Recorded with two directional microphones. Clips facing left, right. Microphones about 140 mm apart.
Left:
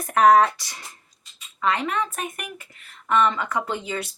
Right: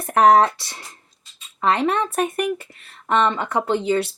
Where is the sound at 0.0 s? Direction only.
30° right (ahead or behind).